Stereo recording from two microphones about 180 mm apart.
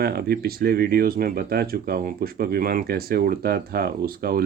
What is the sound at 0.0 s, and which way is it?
Speech, 60° right (ahead or behind).